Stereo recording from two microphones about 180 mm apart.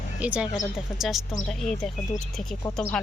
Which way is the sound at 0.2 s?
5° right (ahead or behind).